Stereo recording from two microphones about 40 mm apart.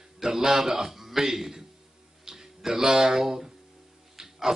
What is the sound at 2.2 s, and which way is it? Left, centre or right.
Music, centre.